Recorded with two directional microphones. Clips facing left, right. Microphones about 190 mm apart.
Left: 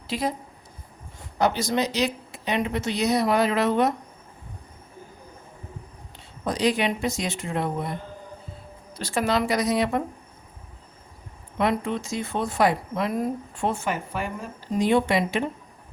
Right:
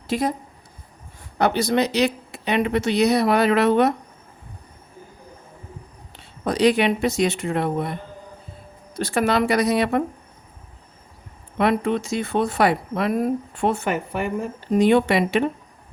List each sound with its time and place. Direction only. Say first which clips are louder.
0.1 s speech: right 4 dB; 50° right (ahead or behind)
1.4 s speech: right 4 dB; 60° right (ahead or behind)
6.1 s speech: right 5 dB; 65° right (ahead or behind)
9.0 s speech: right 4 dB; 55° right (ahead or behind)
11.5 s speech: right 4 dB; 65° right (ahead or behind)